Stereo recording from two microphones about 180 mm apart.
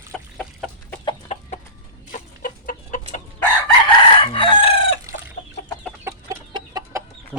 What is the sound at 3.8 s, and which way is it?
Chicken, 30° left (ahead or behind).